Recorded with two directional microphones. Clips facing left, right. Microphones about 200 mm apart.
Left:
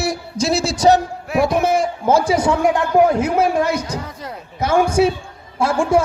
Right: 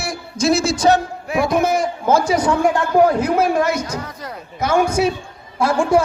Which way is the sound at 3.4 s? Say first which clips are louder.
Even; 30° left (ahead or behind).